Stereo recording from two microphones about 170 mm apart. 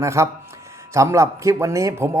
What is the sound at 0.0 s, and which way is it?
Speech, 15° right (ahead or behind).